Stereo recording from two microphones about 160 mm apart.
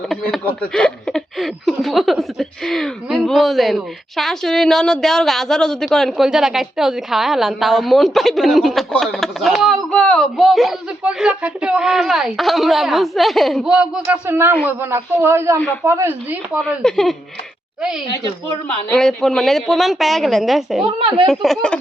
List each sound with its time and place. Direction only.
0.1 s a man's voice: 5° left (ahead or behind); by 16.6 s 10° right (ahead or behind)
16.6 s speech: 5° left (ahead or behind)
18.9 s speech: 5° left (ahead or behind)
20.8 s speech: 35° right (ahead or behind)
21.2 s speech: centre (ahead or behind)